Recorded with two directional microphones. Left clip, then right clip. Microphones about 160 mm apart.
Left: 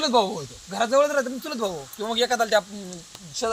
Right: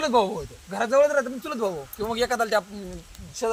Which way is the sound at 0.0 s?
Centre (ahead or behind).